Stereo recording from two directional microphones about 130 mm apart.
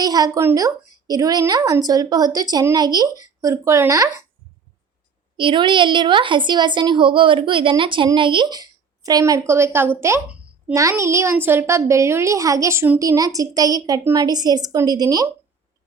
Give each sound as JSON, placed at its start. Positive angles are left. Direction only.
{"t": 0.0, "sound": "a woman's voice", "side_deg": -30}
{"t": 5.4, "sound": "a woman's voice", "side_deg": -40}